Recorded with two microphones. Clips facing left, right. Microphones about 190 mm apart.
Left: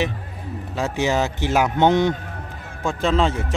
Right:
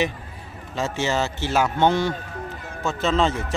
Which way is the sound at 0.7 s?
15° left (ahead or behind).